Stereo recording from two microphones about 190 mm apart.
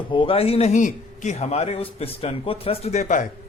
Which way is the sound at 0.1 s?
30° left (ahead or behind).